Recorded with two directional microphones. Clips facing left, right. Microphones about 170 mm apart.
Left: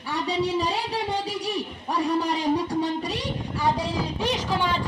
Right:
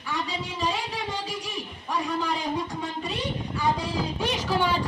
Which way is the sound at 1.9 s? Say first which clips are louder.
Left 3 dB; 35° left (ahead or behind).